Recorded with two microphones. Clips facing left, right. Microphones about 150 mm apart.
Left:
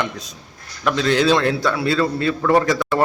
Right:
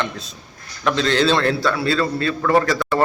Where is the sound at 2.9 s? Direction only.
Centre (ahead or behind).